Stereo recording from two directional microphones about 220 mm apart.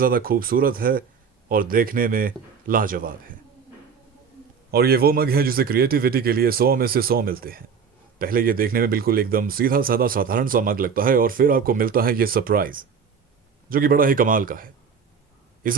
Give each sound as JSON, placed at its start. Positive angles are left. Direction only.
{"t": 0.0, "sound": "speech", "side_deg": -40}
{"t": 4.7, "sound": "a man's voice", "side_deg": -45}